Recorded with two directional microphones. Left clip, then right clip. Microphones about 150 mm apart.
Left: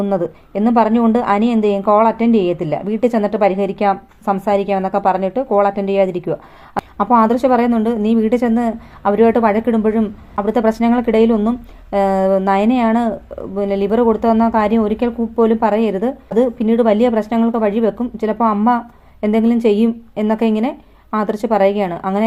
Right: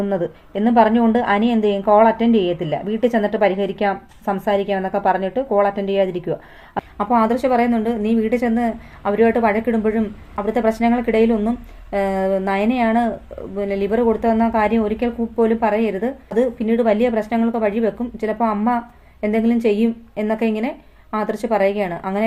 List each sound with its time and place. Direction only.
0.1 s a woman's voice: 15° left (ahead or behind)